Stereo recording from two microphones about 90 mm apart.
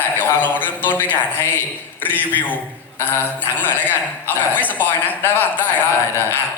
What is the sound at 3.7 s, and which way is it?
A woman's voice, 20° left (ahead or behind).